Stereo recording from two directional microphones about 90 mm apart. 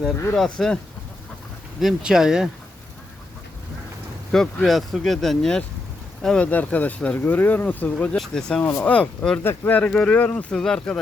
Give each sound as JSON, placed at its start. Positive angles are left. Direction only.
{"t": 0.3, "sound": "speech", "side_deg": 5}
{"t": 1.8, "sound": "speech", "side_deg": -5}
{"t": 4.3, "sound": "speech", "side_deg": 5}
{"t": 9.4, "sound": "speech", "side_deg": 20}